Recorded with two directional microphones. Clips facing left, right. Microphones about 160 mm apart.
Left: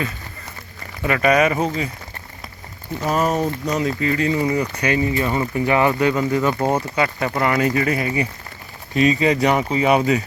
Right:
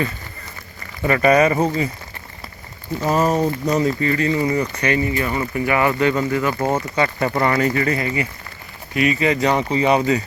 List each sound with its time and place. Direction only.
1.0 s speech: 5° left (ahead or behind)
3.1 s speech: 20° right (ahead or behind)
3.8 s speech: 5° left (ahead or behind)
6.9 s speech: 5° left (ahead or behind)
7.7 s speech: 15° left (ahead or behind)